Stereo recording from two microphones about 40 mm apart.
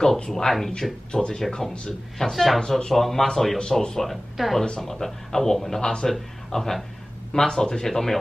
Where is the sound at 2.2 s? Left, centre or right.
Centre.